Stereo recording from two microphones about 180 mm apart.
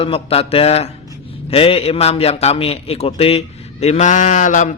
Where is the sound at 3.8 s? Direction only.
40° left (ahead or behind).